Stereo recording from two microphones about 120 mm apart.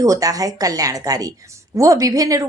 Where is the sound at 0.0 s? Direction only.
30° right (ahead or behind).